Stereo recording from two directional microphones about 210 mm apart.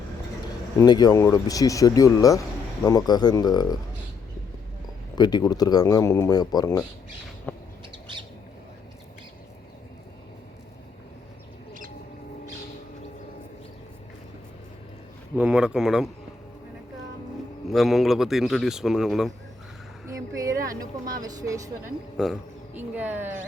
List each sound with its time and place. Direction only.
0.8 s speech: 20° left (ahead or behind)
5.1 s speech: 20° left (ahead or behind)
7.5 s bird: 10° left (ahead or behind)
15.4 s a man's voice: 5° right (ahead or behind)
17.7 s a man's voice: centre (ahead or behind)
20.1 s speech: 15° right (ahead or behind)
20.7 s speech: 40° right (ahead or behind)
21.2 s speech: 20° right (ahead or behind)
22.2 s speech: 5° right (ahead or behind)